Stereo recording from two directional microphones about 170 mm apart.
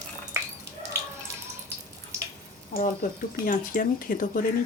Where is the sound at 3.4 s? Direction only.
55° left (ahead or behind).